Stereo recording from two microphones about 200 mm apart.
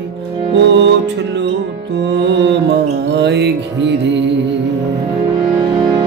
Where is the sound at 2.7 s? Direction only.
60° right (ahead or behind).